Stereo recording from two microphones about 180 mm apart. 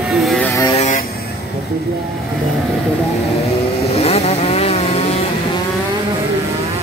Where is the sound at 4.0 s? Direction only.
35° left (ahead or behind).